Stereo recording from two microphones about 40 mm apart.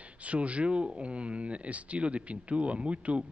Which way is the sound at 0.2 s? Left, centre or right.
Right.